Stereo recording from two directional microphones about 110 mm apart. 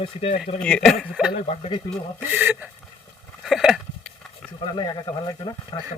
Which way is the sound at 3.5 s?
5° right (ahead or behind).